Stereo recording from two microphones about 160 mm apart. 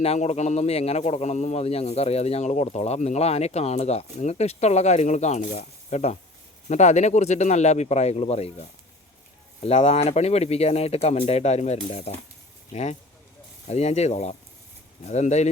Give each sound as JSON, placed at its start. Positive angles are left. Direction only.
{"t": 0.0, "sound": "speech", "side_deg": 40}
{"t": 9.6, "sound": "speech", "side_deg": 40}